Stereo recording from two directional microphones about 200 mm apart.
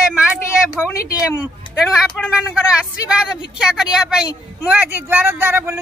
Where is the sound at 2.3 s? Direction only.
5° right (ahead or behind).